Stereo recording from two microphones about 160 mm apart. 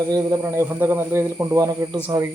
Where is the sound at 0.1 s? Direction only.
20° right (ahead or behind).